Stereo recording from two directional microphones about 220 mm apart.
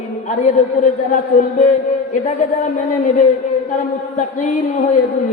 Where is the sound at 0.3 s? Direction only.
35° left (ahead or behind).